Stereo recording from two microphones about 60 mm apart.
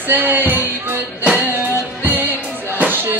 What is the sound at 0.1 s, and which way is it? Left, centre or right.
Music, right.